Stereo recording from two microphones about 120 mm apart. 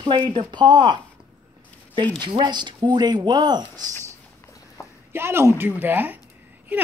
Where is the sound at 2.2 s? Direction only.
40° right (ahead or behind).